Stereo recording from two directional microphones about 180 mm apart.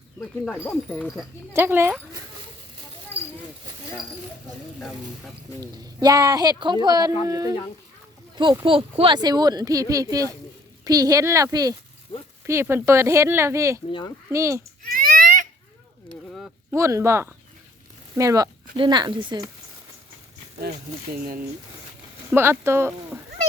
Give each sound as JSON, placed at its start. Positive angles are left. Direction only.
{"t": 0.2, "sound": "speech", "side_deg": 5}
{"t": 1.5, "sound": "speech", "side_deg": -15}
{"t": 5.5, "sound": "speech", "side_deg": -20}
{"t": 14.8, "sound": "baby cry", "side_deg": -55}
{"t": 16.7, "sound": "speech", "side_deg": -15}
{"t": 20.6, "sound": "speech", "side_deg": -60}
{"t": 22.3, "sound": "speech", "side_deg": -15}